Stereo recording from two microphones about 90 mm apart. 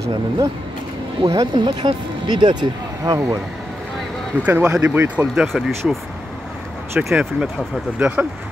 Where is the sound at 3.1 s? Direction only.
40° right (ahead or behind).